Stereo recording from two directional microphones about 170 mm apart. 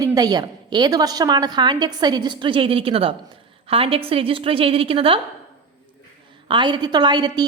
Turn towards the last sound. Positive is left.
turn(degrees=-25)  # may be behind; listen again after turning